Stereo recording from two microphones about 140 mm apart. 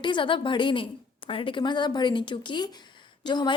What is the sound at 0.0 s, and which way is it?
A woman's voice, 35° left (ahead or behind).